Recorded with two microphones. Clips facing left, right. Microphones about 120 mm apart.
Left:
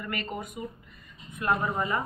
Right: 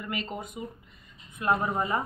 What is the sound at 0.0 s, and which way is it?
Speech, 25° right (ahead or behind).